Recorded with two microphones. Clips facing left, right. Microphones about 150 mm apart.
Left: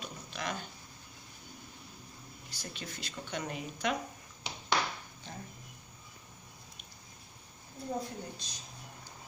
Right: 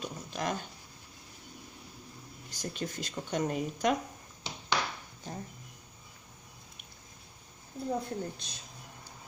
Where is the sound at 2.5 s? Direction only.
45° right (ahead or behind).